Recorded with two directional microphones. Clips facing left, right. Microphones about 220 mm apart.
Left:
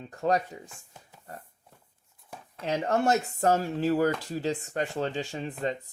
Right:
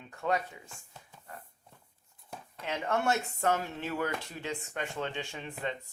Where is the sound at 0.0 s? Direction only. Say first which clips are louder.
Left 5 dB; 35° left (ahead or behind).